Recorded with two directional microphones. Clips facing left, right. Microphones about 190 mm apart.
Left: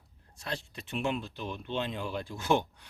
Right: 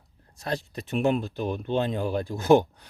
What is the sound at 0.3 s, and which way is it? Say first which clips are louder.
Speech: right 8 dB; 40° right (ahead or behind).